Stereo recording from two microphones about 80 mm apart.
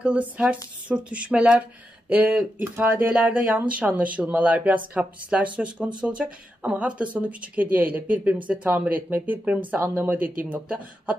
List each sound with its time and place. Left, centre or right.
0.0 s speech: centre